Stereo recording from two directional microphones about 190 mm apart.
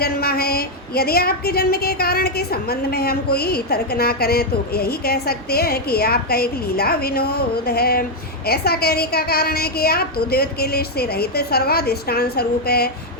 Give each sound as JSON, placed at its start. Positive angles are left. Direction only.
{"t": 0.0, "sound": "a woman's voice", "side_deg": 55}